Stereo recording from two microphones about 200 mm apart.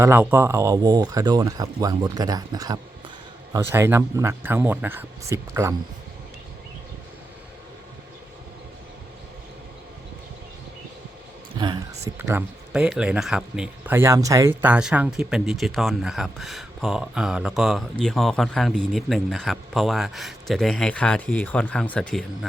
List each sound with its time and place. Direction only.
0.0 s speech: 10° right (ahead or behind)
11.5 s speech: 20° right (ahead or behind); by 22.2 s 5° left (ahead or behind)